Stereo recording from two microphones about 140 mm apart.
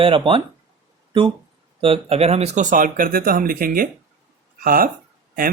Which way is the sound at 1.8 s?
45° right (ahead or behind).